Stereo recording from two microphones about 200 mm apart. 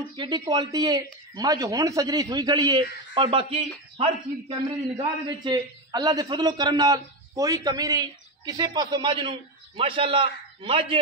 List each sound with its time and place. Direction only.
0.1 s speech: 25° right (ahead or behind)